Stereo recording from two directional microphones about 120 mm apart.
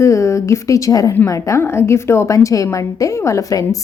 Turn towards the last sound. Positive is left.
turn(degrees=30)  # may be behind; listen again after turning